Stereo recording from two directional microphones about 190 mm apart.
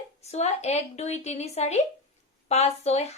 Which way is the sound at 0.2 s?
35° left (ahead or behind).